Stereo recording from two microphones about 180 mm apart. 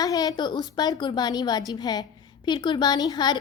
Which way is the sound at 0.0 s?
20° left (ahead or behind).